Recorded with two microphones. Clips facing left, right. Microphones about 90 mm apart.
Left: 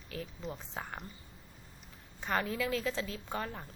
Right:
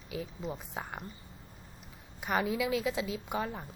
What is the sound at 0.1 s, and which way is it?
Speech, 15° right (ahead or behind).